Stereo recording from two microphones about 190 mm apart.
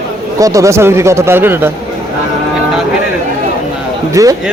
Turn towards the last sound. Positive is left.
turn(degrees=-15)  # may be behind; listen again after turning